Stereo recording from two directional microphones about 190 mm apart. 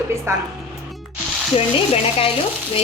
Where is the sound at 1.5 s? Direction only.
30° left (ahead or behind).